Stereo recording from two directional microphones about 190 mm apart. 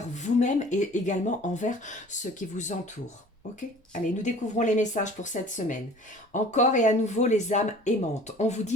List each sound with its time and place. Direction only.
0.1 s speech: 40° left (ahead or behind)